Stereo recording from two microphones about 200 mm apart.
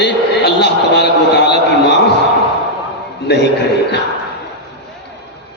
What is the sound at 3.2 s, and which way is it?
Speech, 60° left (ahead or behind).